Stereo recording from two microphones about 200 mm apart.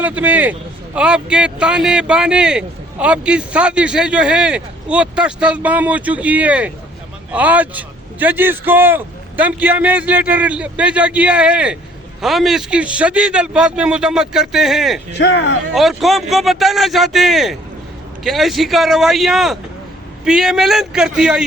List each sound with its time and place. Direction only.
0.0 s a man's voice: 5° right (ahead or behind)
15.2 s speech: 65° left (ahead or behind)
15.7 s a man's voice: centre (ahead or behind)